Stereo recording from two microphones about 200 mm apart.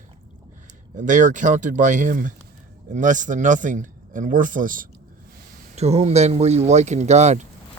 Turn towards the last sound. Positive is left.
turn(degrees=-35)  # may be behind; listen again after turning